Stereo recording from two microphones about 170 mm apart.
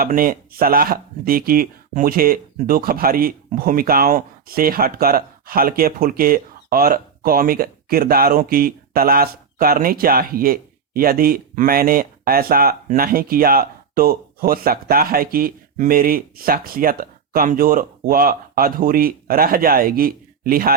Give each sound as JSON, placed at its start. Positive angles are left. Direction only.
{"t": 0.0, "sound": "speech", "side_deg": -55}